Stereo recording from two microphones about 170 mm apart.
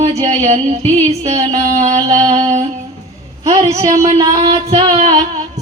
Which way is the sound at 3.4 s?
40° right (ahead or behind).